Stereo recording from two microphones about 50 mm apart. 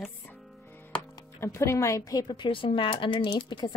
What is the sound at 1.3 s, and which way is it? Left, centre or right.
Speech, left.